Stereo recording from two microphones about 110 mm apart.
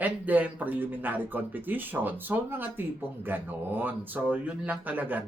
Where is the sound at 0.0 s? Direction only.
15° right (ahead or behind).